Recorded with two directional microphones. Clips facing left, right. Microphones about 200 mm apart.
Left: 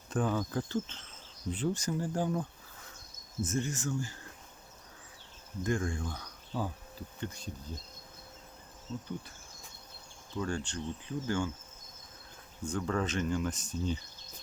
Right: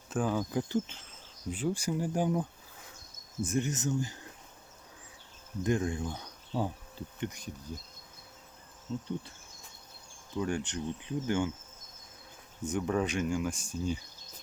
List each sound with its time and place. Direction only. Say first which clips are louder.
0.1 s speech: right 1 dB; 5° right (ahead or behind)
5.6 s speech: right 3 dB; 20° right (ahead or behind)
8.9 s speech: right 3 dB; 15° right (ahead or behind)
10.3 s speech: right 2 dB; 15° right (ahead or behind)
12.6 s speech: right 2 dB; 20° right (ahead or behind)